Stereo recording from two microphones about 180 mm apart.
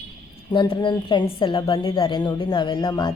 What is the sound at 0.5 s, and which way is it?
A woman's voice, 25° left (ahead or behind).